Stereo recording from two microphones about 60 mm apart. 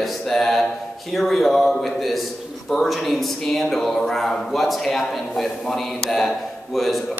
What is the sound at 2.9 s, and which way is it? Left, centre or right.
A man's voice, centre.